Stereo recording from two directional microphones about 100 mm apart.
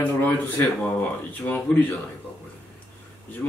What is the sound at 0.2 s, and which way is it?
Speech, 20° left (ahead or behind).